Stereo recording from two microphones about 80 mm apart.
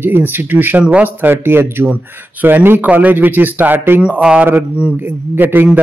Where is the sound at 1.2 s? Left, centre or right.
Right.